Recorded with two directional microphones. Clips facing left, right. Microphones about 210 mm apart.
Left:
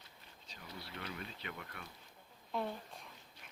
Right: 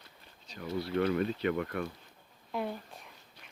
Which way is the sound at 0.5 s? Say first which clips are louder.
Right 18 dB; 65° right (ahead or behind).